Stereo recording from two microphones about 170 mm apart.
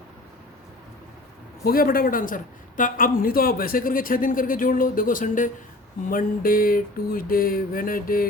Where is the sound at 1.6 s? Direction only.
55° left (ahead or behind).